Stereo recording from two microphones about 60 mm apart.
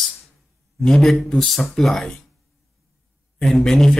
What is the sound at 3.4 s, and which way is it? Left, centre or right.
Speech, centre.